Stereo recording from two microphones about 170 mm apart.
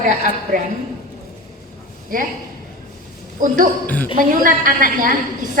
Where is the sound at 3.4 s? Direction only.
50° right (ahead or behind).